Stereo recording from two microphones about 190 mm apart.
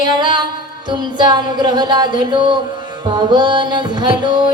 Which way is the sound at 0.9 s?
25° right (ahead or behind).